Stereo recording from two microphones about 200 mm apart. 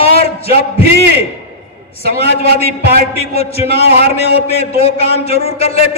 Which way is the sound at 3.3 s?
30° left (ahead or behind).